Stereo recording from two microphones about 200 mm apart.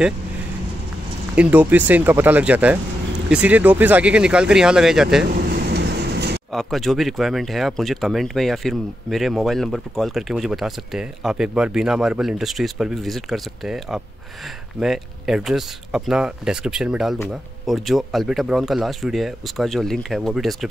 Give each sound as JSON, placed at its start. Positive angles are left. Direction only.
{"t": 1.3, "sound": "speech", "side_deg": -5}
{"t": 5.3, "sound": "vehicle", "side_deg": -50}
{"t": 6.5, "sound": "speech", "side_deg": 0}